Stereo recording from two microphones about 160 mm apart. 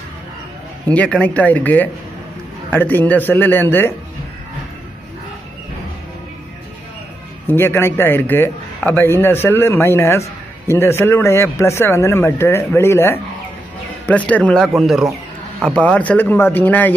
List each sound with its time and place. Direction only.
0.8 s a man's voice: 5° left (ahead or behind)
7.4 s a man's voice: 15° left (ahead or behind)